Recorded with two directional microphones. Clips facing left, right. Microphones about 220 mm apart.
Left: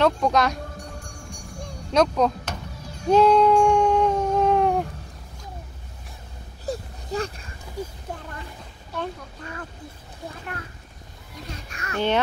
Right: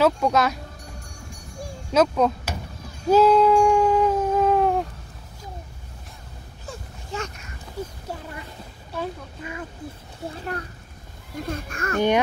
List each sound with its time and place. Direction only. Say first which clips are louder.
0.0 s speech: right 1 dB; 5° right (ahead or behind)
1.6 s music: right 1 dB; 5° right (ahead or behind)
3.1 s cat: right 1 dB; 5° right (ahead or behind)
6.6 s a sound: left 9 dB; 35° left (ahead or behind)
7.8 s speech: even; 10° left (ahead or behind)
8.9 s speech: right 1 dB; 10° right (ahead or behind)
11.3 s a child's voice: right 8 dB; 50° right (ahead or behind)